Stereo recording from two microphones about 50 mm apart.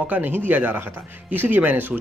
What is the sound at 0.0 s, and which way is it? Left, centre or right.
Speech, right.